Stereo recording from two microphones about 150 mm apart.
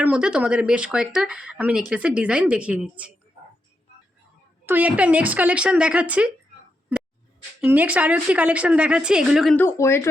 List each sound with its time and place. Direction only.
0.0 s a woman's voice: 5° right (ahead or behind)
4.6 s a woman's voice: 10° right (ahead or behind)
7.6 s a woman's voice: 10° right (ahead or behind)
9.6 s speech: 15° left (ahead or behind)